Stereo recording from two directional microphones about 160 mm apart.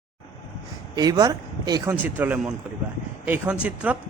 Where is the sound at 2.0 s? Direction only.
10° right (ahead or behind).